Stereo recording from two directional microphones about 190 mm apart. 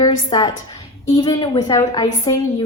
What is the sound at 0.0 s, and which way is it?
A woman's voice, 20° left (ahead or behind).